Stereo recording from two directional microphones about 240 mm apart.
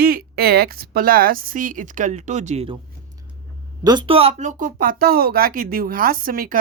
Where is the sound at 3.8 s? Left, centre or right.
Right.